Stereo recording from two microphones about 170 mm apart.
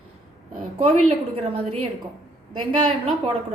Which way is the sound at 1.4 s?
40° right (ahead or behind).